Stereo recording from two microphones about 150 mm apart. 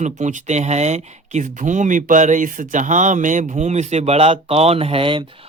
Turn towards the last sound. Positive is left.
turn(degrees=-35)  # may be behind; listen again after turning